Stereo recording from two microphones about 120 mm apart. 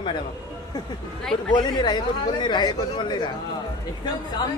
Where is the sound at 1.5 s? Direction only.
40° left (ahead or behind).